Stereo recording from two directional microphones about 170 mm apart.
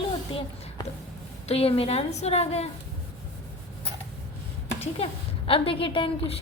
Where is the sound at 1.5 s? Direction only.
35° left (ahead or behind).